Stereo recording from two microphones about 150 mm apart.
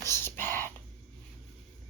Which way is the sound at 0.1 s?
15° left (ahead or behind).